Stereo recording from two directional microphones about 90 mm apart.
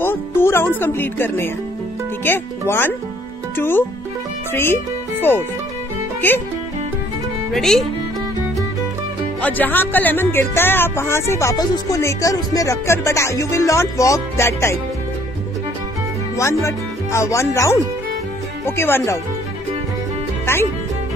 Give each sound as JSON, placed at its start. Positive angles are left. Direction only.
{"t": 0.0, "sound": "music", "side_deg": 25}
{"t": 2.2, "sound": "speech", "side_deg": 25}
{"t": 6.2, "sound": "speech", "side_deg": 20}
{"t": 7.5, "sound": "speech", "side_deg": 5}
{"t": 9.4, "sound": "speech", "side_deg": 20}
{"t": 11.5, "sound": "speech", "side_deg": 50}
{"t": 12.0, "sound": "music", "side_deg": 35}
{"t": 16.6, "sound": "speech", "side_deg": 35}